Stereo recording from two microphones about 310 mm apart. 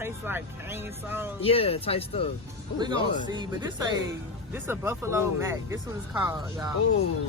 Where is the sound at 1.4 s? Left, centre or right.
Centre.